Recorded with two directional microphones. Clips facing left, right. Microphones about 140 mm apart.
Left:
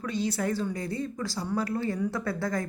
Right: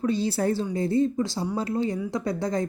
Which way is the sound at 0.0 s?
30° right (ahead or behind).